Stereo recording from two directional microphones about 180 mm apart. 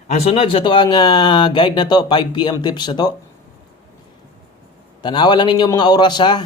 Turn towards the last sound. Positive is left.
turn(degrees=25)  # may be behind; listen again after turning